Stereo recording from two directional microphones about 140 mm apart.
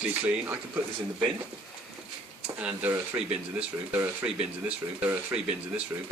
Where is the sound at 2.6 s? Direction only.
15° right (ahead or behind).